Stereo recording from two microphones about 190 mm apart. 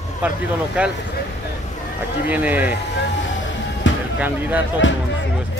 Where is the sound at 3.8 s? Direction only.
75° left (ahead or behind).